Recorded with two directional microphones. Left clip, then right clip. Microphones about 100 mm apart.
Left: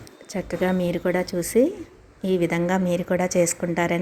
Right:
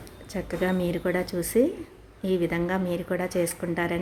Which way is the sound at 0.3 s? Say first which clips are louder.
Left 3 dB; 40° left (ahead or behind).